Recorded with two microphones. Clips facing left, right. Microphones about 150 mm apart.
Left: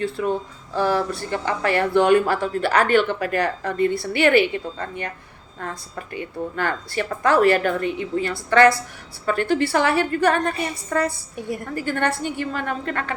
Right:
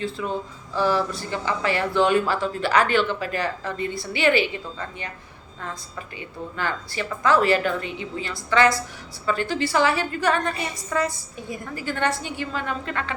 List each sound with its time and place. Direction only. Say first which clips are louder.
0.0 s a woman's voice: left 4 dB; 55° left (ahead or behind)